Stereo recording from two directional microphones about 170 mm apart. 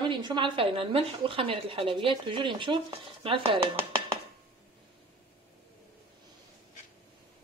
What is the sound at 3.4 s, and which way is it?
Dishes, 15° right (ahead or behind).